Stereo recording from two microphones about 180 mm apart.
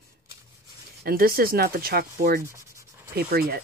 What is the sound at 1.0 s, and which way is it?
Speech, 55° right (ahead or behind).